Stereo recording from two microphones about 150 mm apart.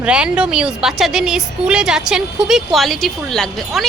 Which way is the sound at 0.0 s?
5° right (ahead or behind).